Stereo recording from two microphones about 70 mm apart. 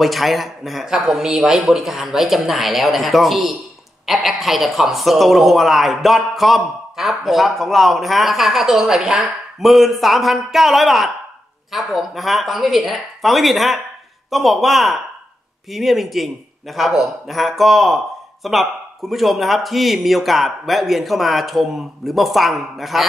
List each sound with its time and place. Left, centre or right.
0.0 s a man's voice: centre